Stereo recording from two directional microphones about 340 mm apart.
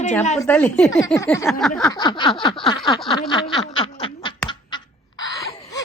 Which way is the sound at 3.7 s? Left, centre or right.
Centre.